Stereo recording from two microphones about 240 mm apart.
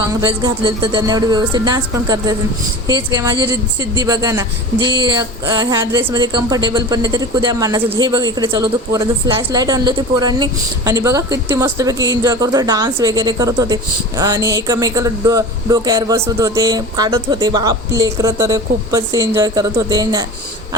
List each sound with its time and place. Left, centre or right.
0.1 s a woman's voice: centre